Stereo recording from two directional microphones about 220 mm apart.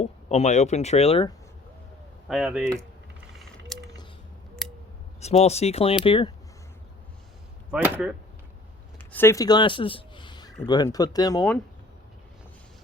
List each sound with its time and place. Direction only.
0.0 s speech: 30° left (ahead or behind)
2.2 s speech: centre (ahead or behind)
3.7 s a sound: centre (ahead or behind)
5.2 s speech: 30° left (ahead or behind)
7.7 s speech: 5° right (ahead or behind)
9.1 s speech: 10° left (ahead or behind)